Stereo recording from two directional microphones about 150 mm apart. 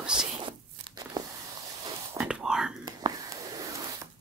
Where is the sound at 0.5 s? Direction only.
25° right (ahead or behind).